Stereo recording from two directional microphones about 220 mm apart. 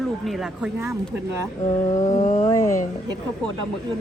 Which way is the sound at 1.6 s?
20° left (ahead or behind).